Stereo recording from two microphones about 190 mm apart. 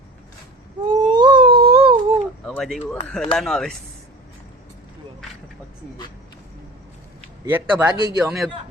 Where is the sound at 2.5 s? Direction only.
Centre (ahead or behind).